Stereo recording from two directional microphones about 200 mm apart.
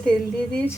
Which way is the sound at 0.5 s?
10° left (ahead or behind).